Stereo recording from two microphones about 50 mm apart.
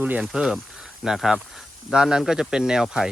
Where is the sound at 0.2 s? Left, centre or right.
Centre.